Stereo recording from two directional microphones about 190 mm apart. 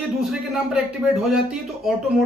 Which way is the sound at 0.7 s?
5° right (ahead or behind).